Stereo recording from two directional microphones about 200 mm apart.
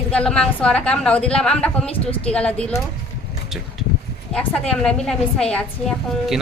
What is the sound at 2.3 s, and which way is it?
Speech, 5° left (ahead or behind).